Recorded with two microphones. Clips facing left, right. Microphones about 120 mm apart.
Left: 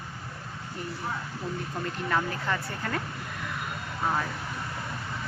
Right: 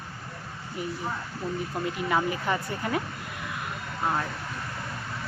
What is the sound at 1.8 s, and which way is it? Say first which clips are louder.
Speech: right 2 dB; 10° right (ahead or behind).